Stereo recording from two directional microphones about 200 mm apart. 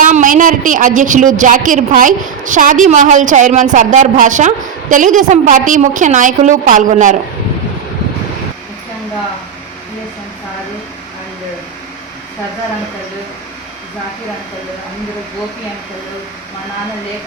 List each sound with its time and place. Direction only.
0.0 s a woman's voice: 40° right (ahead or behind)